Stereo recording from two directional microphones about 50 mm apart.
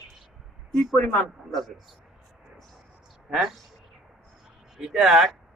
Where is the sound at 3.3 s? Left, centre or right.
Centre.